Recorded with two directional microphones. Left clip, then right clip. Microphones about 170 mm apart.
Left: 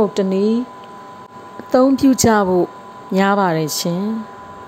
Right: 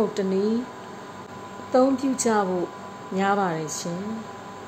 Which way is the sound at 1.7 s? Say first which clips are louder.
Left 7 dB; 60° left (ahead or behind).